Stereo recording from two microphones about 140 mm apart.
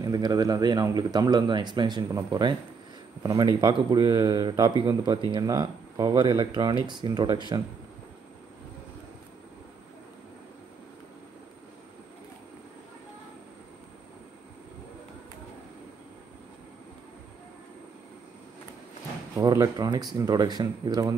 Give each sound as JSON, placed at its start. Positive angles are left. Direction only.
{"t": 0.0, "sound": "a man's voice", "side_deg": -30}
{"t": 19.3, "sound": "speech", "side_deg": -25}